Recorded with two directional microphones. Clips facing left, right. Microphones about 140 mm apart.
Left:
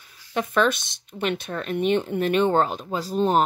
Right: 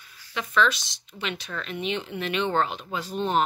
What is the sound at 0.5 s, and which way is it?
Speech, 50° left (ahead or behind).